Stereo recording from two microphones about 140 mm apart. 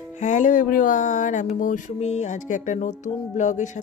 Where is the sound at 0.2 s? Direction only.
60° left (ahead or behind).